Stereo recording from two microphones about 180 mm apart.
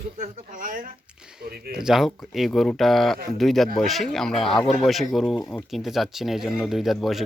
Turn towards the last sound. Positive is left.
turn(degrees=0)  # may be behind; listen again after turning